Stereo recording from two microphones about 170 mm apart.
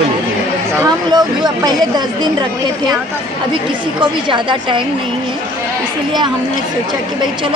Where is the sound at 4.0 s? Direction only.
30° right (ahead or behind).